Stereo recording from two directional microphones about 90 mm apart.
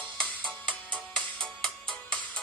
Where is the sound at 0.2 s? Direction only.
10° left (ahead or behind).